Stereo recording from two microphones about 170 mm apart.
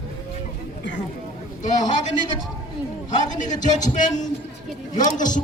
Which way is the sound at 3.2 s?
45° left (ahead or behind).